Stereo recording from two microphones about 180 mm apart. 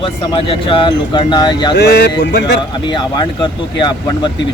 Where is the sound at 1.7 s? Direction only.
65° left (ahead or behind).